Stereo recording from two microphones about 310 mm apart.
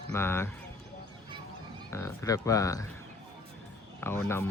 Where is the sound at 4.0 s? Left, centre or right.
Centre.